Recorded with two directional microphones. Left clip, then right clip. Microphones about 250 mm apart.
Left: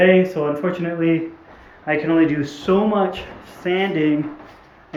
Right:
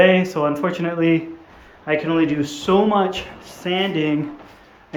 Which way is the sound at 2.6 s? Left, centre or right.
Centre.